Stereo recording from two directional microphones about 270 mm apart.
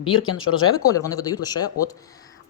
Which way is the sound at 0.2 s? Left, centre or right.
Left.